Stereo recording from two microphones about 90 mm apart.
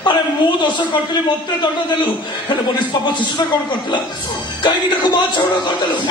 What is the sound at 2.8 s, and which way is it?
Speech, 60° left (ahead or behind).